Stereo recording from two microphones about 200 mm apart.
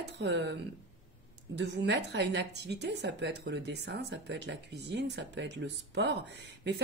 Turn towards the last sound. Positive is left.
turn(degrees=-60)  # may be behind; listen again after turning